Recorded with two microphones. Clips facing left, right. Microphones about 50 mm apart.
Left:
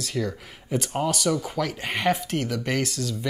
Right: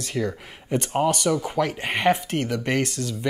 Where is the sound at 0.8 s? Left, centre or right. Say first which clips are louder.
Right 4 dB; right.